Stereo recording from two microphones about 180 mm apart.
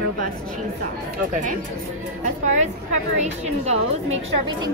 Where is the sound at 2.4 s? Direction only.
40° right (ahead or behind).